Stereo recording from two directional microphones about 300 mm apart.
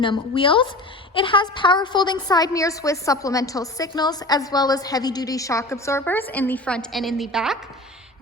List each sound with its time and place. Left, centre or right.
0.0 s a woman's voice: centre